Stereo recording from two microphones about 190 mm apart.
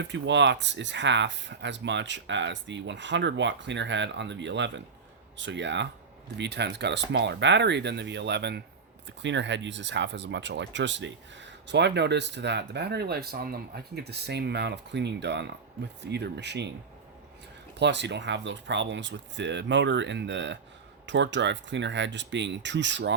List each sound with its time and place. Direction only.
0.0 s speech: 70° right (ahead or behind)
17.7 s speech: 65° right (ahead or behind)